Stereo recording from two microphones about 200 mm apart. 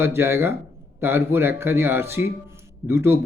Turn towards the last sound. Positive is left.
turn(degrees=-10)  # may be behind; listen again after turning